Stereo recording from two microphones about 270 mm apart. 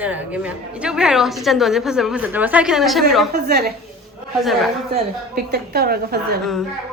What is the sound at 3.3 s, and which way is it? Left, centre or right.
Speech, right.